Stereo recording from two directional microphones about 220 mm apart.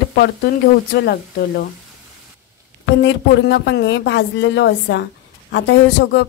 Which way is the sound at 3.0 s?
55° left (ahead or behind).